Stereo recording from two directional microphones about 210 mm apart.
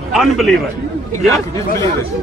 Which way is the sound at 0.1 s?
Centre (ahead or behind).